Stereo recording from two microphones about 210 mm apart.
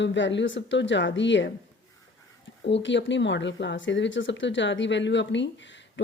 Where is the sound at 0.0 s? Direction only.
60° left (ahead or behind).